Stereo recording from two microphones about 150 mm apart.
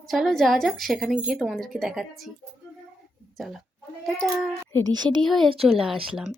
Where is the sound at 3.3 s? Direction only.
Centre (ahead or behind).